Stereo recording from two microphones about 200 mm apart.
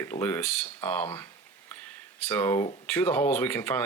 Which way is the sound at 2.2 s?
10° left (ahead or behind).